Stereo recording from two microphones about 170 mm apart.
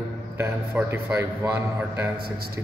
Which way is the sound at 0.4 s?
15° right (ahead or behind).